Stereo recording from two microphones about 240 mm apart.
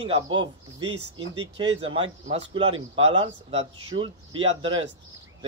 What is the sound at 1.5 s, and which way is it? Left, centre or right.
Speech, right.